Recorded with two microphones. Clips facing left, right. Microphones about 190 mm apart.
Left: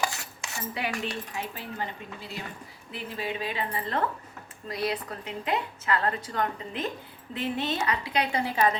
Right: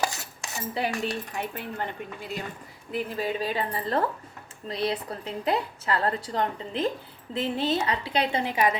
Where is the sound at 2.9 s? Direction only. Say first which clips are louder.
Right 5 dB; 40° right (ahead or behind).